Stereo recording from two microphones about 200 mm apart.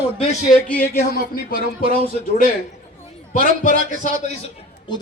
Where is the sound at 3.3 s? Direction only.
40° left (ahead or behind).